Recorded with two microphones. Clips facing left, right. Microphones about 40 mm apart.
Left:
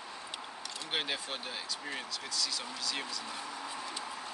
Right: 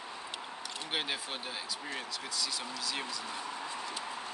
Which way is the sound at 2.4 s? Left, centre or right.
Centre.